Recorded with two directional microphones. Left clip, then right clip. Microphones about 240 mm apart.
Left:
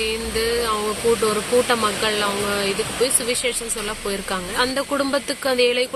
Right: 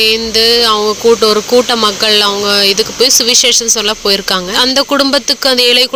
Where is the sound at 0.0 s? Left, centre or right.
Right.